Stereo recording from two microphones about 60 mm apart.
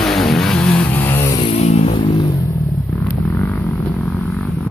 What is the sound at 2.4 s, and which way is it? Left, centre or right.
Vehicle, left.